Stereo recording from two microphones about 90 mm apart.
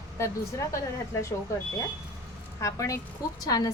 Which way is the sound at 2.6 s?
35° left (ahead or behind).